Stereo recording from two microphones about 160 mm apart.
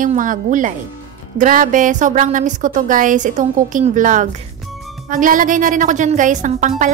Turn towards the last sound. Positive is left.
turn(degrees=-50)  # may be behind; listen again after turning